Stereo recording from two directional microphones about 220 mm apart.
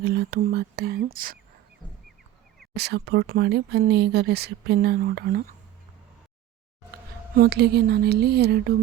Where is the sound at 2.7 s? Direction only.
50° right (ahead or behind).